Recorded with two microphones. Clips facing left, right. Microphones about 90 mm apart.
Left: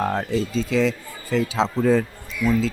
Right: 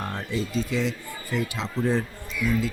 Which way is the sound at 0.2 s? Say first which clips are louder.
Left 5 dB; 90° left.